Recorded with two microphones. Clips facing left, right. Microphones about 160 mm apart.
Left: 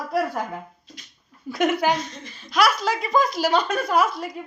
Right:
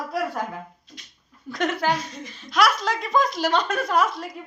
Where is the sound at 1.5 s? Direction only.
10° left (ahead or behind).